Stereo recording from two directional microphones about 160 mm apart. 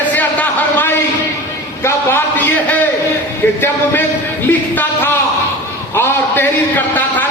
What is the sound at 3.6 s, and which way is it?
Speech, 15° left (ahead or behind).